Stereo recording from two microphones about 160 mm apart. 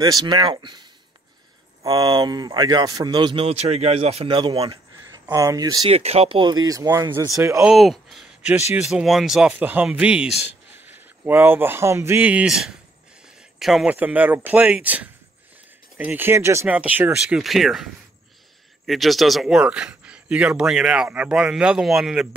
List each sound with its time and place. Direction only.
0.0 s speech: 25° right (ahead or behind)
5.3 s speech: 20° right (ahead or behind)
5.9 s speech: 40° right (ahead or behind); by 7.6 s 20° right (ahead or behind)
7.6 s speech: centre (ahead or behind)
18.9 s speech: centre (ahead or behind)